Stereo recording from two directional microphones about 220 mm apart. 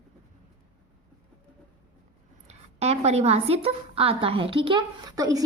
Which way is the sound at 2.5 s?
30° right (ahead or behind).